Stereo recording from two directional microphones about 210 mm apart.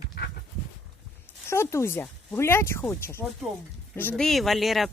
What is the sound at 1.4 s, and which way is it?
Speech, 10° left (ahead or behind).